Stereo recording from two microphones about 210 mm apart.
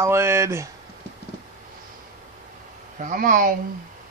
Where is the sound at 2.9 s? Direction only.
35° right (ahead or behind).